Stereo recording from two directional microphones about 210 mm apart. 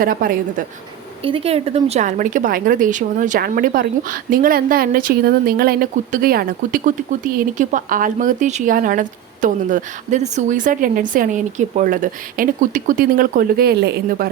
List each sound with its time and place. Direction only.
0.0 s a woman's voice: 45° right (ahead or behind)
1.2 s speech: 25° right (ahead or behind); by 14.3 s 45° right (ahead or behind)